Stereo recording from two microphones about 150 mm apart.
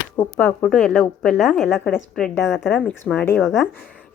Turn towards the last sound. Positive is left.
turn(degrees=0)  # may be behind; listen again after turning